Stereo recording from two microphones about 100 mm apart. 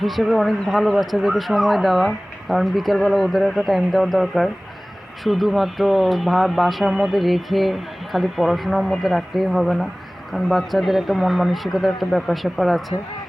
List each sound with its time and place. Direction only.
0.0 s speech: centre (ahead or behind)